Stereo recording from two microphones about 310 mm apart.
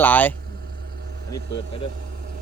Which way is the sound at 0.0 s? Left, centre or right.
Centre.